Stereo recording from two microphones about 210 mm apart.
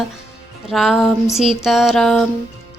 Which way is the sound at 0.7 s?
Centre (ahead or behind).